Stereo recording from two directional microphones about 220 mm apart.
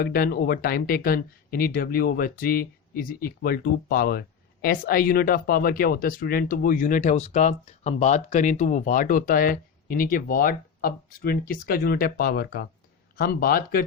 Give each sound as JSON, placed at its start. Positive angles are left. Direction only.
{"t": 0.0, "sound": "speech", "side_deg": 45}